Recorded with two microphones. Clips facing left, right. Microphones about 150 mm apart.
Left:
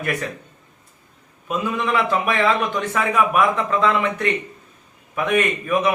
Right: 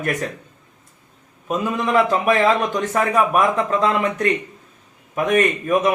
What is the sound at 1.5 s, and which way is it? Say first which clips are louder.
A man's voice: right 2 dB; 40° right (ahead or behind).